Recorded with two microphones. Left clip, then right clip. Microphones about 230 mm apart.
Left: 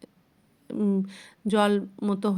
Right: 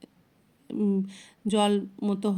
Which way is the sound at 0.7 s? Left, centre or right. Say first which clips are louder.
Left 1 dB; centre.